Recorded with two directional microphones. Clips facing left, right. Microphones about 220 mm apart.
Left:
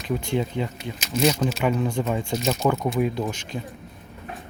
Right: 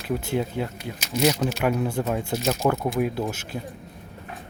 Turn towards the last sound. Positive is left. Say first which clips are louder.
# even
turn(degrees=-5)  # may be behind; listen again after turning